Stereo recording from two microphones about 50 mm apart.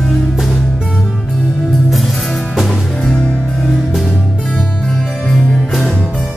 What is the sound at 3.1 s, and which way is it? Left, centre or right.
Music, centre.